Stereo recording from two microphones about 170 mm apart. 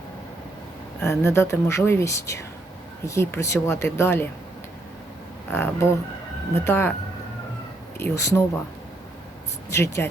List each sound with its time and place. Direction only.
1.0 s speech: 15° left (ahead or behind)
5.5 s speech: 10° left (ahead or behind)
7.9 s speech: 15° left (ahead or behind)
9.6 s speech: 15° left (ahead or behind)